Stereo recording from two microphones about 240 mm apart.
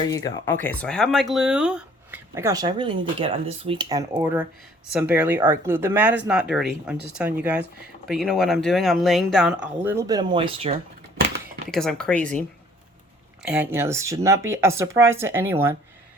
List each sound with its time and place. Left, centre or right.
0.1 s speech: centre
9.8 s speech: centre
11.7 s speech: centre
13.4 s speech: centre